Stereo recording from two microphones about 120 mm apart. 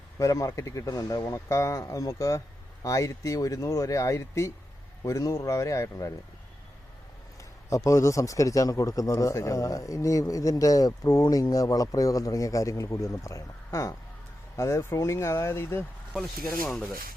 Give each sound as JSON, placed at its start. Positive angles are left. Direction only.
{"t": 0.2, "sound": "speech", "side_deg": 25}
{"t": 7.7, "sound": "speech", "side_deg": 25}